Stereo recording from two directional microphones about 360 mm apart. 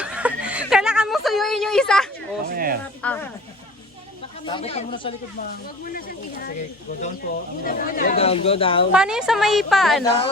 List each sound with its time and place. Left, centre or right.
0.0 s a sound: centre
2.5 s a sound: right
3.0 s speech: centre
4.4 s speech: centre
7.6 s speech: left
8.9 s a woman's voice: centre